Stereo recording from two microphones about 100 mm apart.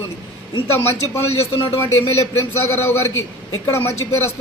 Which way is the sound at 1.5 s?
35° left (ahead or behind).